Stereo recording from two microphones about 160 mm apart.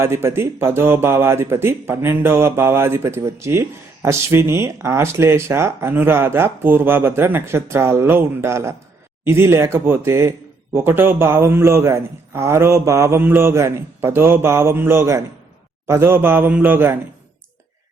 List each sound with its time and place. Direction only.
0.0 s speech: 15° right (ahead or behind)